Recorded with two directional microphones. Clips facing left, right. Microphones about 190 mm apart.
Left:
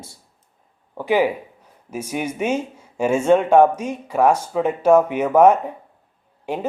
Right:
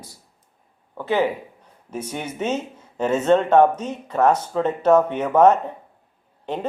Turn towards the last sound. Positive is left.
turn(degrees=10)  # may be behind; listen again after turning